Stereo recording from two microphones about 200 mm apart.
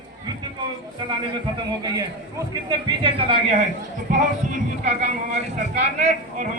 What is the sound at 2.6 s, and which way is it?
Speech, 25° right (ahead or behind).